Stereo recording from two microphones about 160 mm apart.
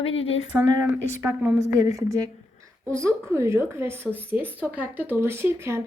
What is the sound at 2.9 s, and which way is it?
A woman's voice, 20° right (ahead or behind).